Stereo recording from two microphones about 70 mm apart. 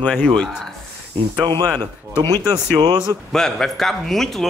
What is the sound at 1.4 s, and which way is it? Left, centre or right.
Speech, right.